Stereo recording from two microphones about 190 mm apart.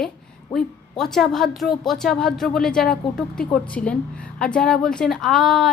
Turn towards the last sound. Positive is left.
turn(degrees=0)  # may be behind; listen again after turning